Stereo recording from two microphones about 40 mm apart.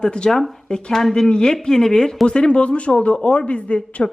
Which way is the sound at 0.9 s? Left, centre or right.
Centre.